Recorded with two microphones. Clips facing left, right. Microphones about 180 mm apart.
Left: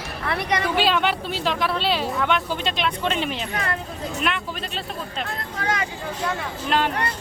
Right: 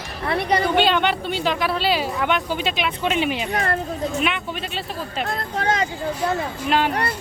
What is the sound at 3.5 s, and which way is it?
Speech, 40° right (ahead or behind).